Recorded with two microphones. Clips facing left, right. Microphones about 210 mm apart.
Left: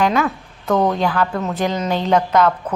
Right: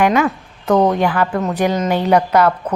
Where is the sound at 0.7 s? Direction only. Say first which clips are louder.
Right 3 dB; 20° right (ahead or behind).